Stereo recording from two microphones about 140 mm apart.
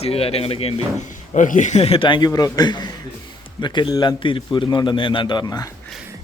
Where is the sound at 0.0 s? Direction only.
45° left (ahead or behind).